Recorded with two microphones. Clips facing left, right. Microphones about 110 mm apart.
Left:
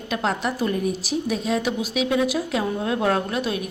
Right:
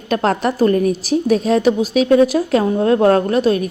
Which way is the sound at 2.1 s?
45° right (ahead or behind).